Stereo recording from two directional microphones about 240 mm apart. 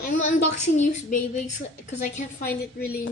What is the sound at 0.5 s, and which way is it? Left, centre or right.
Speech, left.